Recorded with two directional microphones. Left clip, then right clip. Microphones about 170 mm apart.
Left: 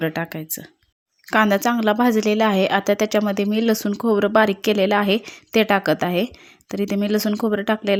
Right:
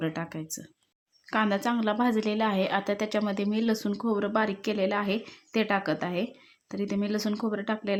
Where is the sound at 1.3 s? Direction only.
40° left (ahead or behind).